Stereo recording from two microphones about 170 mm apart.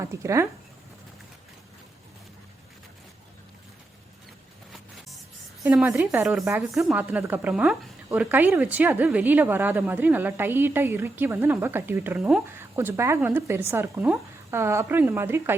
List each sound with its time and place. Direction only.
0.0 s speech: 15° right (ahead or behind)
5.6 s a woman's voice: 10° right (ahead or behind)